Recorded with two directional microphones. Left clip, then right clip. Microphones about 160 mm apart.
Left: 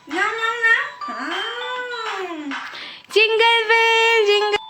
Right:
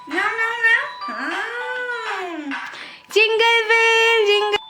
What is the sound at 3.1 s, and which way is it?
Speech, centre (ahead or behind).